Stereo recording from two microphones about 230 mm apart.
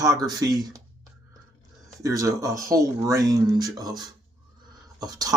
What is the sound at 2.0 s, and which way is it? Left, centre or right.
Speech, centre.